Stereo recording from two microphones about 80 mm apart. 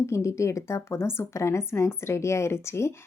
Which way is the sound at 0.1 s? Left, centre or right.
Left.